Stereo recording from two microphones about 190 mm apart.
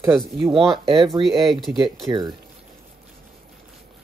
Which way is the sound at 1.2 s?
30° right (ahead or behind).